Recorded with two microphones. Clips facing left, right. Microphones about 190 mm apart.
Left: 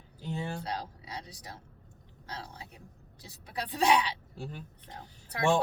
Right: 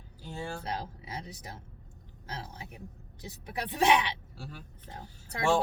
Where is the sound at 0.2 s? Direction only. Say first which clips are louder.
Left 2 dB; 20° left (ahead or behind).